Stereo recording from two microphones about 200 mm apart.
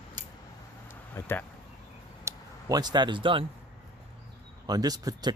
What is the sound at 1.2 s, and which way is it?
Speech, 10° left (ahead or behind).